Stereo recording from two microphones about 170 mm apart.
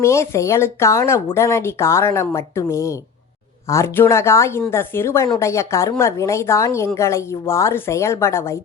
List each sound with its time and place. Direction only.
0.0 s speech: 15° left (ahead or behind)